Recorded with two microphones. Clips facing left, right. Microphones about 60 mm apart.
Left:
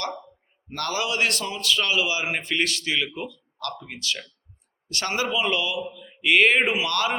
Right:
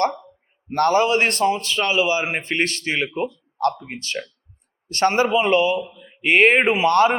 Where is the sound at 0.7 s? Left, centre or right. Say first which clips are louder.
Right 10 dB; right.